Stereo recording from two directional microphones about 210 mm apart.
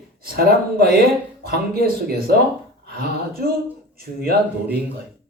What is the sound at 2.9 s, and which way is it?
Speech, 45° right (ahead or behind).